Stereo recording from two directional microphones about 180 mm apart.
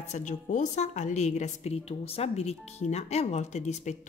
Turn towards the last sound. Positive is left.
turn(degrees=40)  # may be behind; listen again after turning